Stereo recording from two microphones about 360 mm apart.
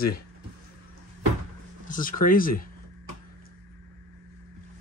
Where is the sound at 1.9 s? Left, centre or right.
Left.